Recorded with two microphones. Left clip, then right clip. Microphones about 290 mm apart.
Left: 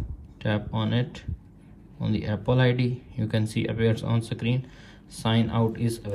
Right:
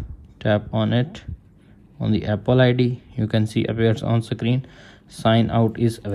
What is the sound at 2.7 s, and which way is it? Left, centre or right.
Speech, right.